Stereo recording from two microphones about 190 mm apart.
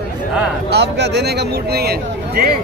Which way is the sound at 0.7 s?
65° right (ahead or behind).